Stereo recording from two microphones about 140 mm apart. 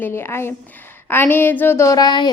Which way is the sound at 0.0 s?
15° left (ahead or behind).